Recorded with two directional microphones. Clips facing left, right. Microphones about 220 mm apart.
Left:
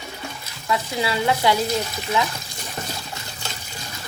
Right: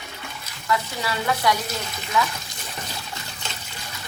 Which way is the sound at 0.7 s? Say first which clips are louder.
Left 2 dB; 25° left (ahead or behind).